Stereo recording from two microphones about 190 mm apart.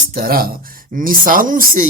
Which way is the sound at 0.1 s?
50° right (ahead or behind).